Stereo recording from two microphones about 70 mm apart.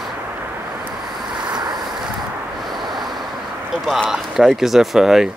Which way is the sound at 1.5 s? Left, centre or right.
Right.